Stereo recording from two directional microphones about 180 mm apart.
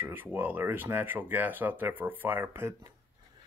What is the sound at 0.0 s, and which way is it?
Speech, 10° right (ahead or behind).